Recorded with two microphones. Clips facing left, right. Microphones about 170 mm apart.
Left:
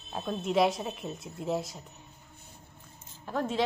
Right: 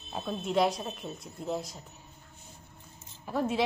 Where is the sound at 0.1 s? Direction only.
Centre (ahead or behind).